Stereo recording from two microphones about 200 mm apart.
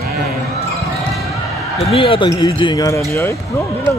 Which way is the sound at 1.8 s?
30° left (ahead or behind).